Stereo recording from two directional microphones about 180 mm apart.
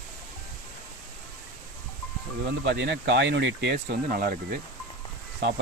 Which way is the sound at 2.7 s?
80° right.